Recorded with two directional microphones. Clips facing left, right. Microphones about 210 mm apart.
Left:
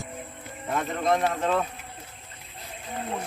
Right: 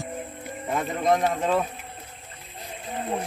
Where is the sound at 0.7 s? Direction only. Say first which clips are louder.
Right 2 dB; 10° right (ahead or behind).